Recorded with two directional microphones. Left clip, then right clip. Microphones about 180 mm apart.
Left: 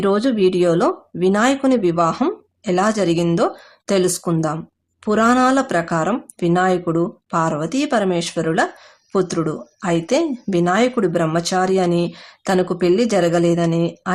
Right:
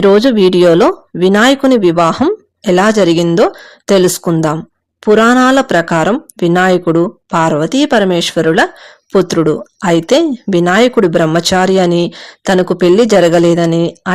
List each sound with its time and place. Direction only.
0.0 s speech: 35° right (ahead or behind)